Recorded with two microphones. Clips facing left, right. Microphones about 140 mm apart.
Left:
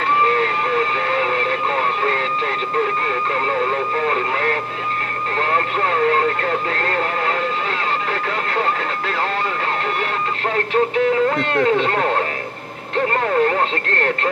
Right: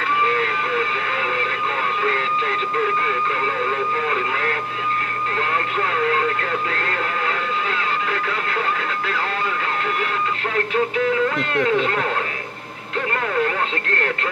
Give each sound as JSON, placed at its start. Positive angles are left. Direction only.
{"t": 0.2, "sound": "vehicle", "side_deg": 40}
{"t": 4.1, "sound": "vehicle", "side_deg": 40}
{"t": 5.8, "sound": "vehicle", "side_deg": 35}
{"t": 11.2, "sound": "speech", "side_deg": 35}
{"t": 12.9, "sound": "radio", "side_deg": 35}